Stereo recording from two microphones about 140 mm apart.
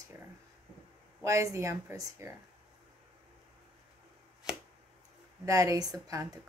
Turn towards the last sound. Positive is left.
turn(degrees=-25)  # may be behind; listen again after turning